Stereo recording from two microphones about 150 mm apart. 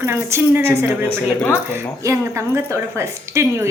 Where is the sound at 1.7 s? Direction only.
15° right (ahead or behind).